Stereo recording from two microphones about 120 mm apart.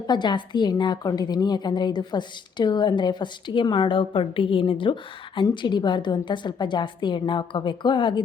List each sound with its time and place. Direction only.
0.1 s a woman's voice: 40° left (ahead or behind)